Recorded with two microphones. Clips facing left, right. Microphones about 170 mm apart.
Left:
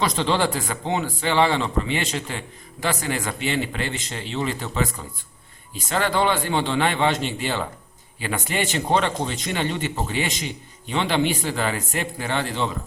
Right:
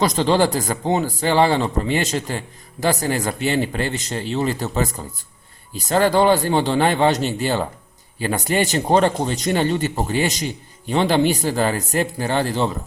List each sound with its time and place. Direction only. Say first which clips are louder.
0.0 s a man's voice: right 5 dB; 40° right (ahead or behind)